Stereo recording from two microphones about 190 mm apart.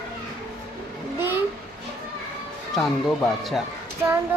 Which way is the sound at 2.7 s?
Centre (ahead or behind).